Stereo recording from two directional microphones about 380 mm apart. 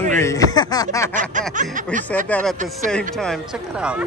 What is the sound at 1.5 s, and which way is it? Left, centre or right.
Speech, centre.